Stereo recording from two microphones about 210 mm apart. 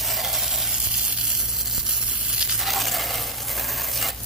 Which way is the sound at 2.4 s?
Centre (ahead or behind).